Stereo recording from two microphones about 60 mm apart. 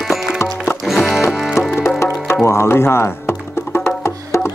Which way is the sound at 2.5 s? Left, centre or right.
Left.